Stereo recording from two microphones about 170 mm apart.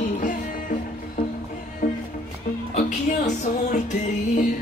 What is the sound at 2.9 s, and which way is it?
Music, 45° left (ahead or behind).